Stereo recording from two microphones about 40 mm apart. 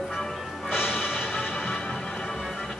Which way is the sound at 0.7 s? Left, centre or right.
Left.